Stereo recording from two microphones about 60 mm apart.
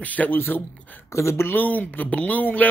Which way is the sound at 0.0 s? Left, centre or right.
Left.